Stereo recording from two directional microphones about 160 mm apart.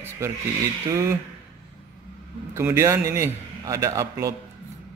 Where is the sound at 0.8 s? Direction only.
20° right (ahead or behind).